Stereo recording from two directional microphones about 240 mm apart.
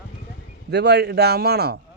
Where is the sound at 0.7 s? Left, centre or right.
Right.